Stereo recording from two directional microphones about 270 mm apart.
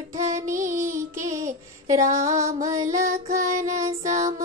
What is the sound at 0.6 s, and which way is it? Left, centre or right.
Music, right.